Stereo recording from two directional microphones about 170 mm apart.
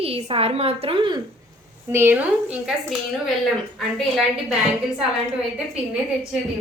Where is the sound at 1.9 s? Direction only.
10° right (ahead or behind).